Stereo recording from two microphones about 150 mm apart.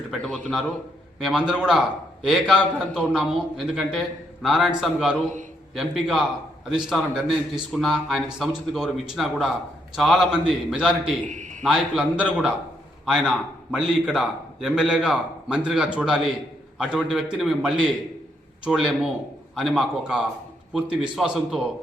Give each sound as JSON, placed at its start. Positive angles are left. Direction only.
{"t": 0.1, "sound": "a man's voice", "side_deg": 0}
{"t": 11.3, "sound": "a sound", "side_deg": -55}
{"t": 11.6, "sound": "a man's voice", "side_deg": 0}